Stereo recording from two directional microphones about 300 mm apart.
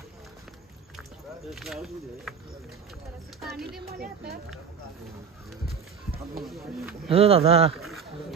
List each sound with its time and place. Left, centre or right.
1.5 s speech: centre
3.3 s speech: centre
4.0 s speech: right
6.4 s speech: centre
7.1 s speech: centre
7.7 s speech: centre